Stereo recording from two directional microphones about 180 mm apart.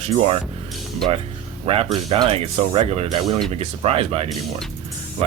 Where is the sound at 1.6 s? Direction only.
30° right (ahead or behind).